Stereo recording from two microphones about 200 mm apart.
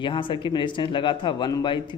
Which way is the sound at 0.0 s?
25° left (ahead or behind).